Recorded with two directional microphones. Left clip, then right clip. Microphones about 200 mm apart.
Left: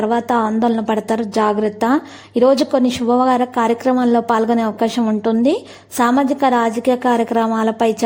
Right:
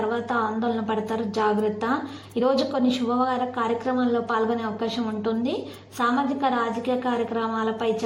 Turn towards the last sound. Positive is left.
turn(degrees=45)  # may be behind; listen again after turning